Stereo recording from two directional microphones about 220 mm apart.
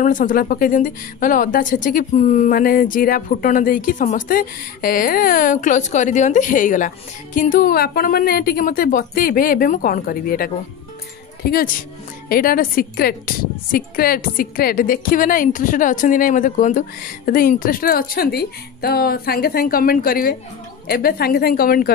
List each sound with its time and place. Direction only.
0.0 s a woman's voice: 35° left (ahead or behind)
12.3 s a woman's voice: 40° left (ahead or behind)